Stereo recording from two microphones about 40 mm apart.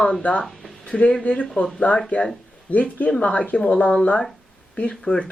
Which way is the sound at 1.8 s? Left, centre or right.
Left.